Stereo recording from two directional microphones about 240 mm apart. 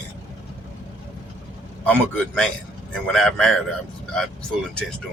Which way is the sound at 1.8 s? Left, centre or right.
Centre.